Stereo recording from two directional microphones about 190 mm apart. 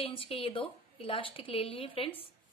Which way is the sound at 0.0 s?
30° left (ahead or behind).